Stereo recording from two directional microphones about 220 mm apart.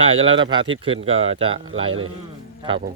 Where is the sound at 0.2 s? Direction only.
25° right (ahead or behind).